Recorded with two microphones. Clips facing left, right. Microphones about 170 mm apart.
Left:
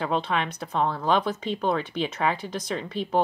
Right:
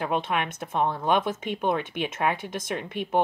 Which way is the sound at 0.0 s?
15° right (ahead or behind).